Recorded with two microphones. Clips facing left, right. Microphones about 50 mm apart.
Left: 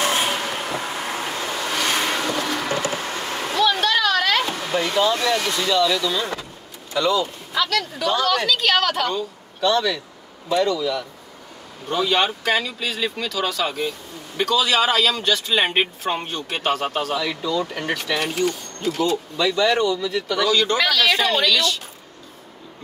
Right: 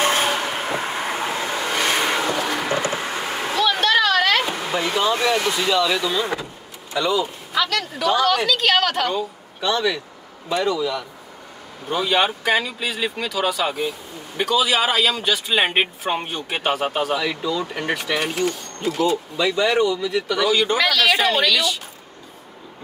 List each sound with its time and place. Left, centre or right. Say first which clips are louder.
0.3 s vehicle: right 2 dB; centre
6.9 s a woman's voice: left 1 dB; centre